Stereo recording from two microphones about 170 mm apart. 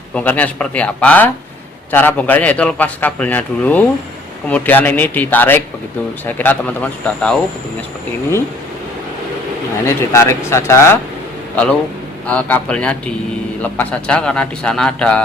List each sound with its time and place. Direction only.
0.1 s a man's voice: 10° left (ahead or behind)
9.8 s a man's voice: 15° left (ahead or behind)
12.3 s a man's voice: 10° left (ahead or behind)